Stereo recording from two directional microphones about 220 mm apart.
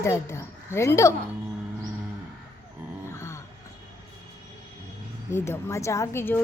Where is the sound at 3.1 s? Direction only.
10° left (ahead or behind).